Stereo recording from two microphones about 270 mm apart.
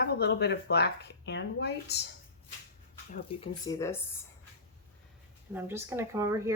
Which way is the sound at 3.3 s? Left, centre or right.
Centre.